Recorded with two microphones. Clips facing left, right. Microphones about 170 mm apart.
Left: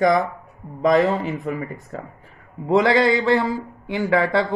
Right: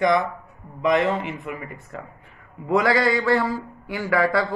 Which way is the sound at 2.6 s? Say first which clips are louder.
Left 3 dB; 25° left (ahead or behind).